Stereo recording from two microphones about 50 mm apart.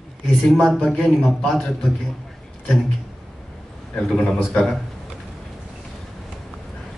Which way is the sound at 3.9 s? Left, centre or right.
Centre.